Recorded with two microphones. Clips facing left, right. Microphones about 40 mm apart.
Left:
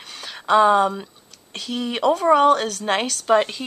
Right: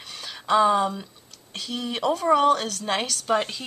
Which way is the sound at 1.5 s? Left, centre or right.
Centre.